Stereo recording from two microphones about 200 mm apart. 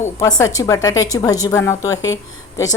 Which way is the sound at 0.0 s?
15° left (ahead or behind).